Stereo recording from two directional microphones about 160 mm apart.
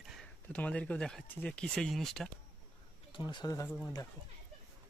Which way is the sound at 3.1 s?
30° left (ahead or behind).